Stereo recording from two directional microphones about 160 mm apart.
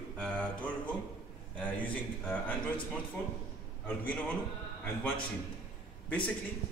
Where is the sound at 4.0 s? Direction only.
10° left (ahead or behind).